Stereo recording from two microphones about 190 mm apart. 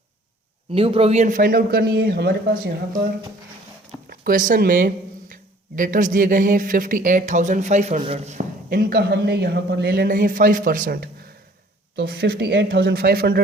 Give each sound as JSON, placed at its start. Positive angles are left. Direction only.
{"t": 0.7, "sound": "speech", "side_deg": -30}
{"t": 4.1, "sound": "speech", "side_deg": -45}